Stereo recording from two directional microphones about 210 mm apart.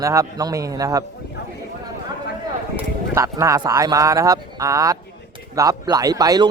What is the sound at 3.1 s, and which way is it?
Speech, 15° right (ahead or behind).